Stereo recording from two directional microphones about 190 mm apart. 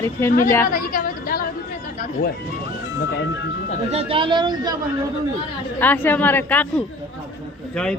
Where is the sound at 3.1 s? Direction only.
70° left (ahead or behind).